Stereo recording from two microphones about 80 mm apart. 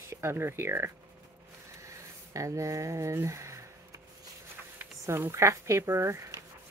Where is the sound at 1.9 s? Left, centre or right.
Right.